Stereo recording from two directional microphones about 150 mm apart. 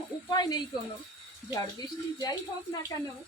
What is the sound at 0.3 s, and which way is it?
Speech, 25° left (ahead or behind).